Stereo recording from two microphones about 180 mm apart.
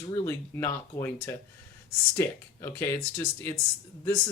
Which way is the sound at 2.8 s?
15° left (ahead or behind).